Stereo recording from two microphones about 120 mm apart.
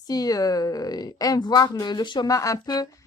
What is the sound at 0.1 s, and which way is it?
Speech, 30° left (ahead or behind).